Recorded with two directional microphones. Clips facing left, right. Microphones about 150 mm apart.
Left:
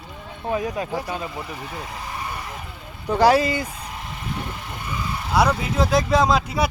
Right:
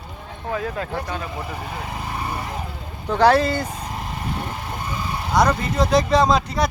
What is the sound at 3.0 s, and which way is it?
Speech, 10° left (ahead or behind).